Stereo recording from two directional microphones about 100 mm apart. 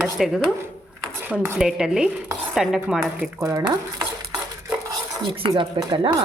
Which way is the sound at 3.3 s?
35° right (ahead or behind).